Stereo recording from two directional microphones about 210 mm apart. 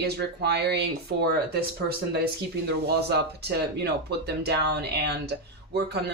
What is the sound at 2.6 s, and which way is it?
Speech, 50° right (ahead or behind).